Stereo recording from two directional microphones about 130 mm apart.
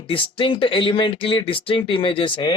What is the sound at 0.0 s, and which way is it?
Speech, 45° left (ahead or behind).